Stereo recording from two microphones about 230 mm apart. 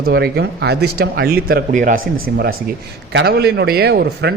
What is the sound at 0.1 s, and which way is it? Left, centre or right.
A man's voice, right.